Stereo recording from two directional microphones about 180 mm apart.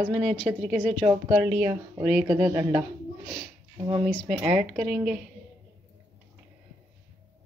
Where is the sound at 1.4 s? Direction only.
10° right (ahead or behind).